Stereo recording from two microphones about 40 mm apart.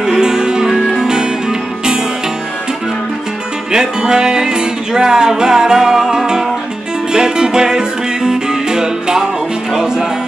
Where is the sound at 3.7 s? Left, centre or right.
Centre.